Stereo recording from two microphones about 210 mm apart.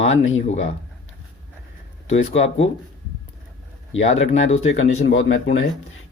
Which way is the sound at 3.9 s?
65° left (ahead or behind).